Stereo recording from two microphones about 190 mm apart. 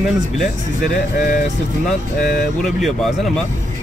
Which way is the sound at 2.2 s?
Centre (ahead or behind).